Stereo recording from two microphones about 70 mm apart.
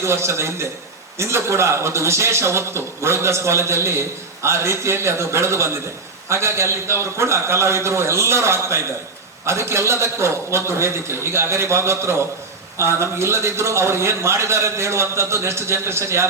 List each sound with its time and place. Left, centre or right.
0.0 s a man's voice: right